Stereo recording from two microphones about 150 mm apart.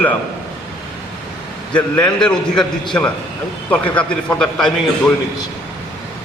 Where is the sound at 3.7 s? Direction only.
10° left (ahead or behind).